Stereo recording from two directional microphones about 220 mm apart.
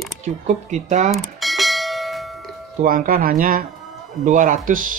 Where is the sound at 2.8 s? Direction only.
40° right (ahead or behind).